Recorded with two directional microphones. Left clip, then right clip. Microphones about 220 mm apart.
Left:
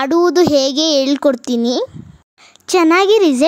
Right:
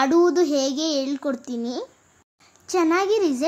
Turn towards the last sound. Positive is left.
turn(degrees=40)  # may be behind; listen again after turning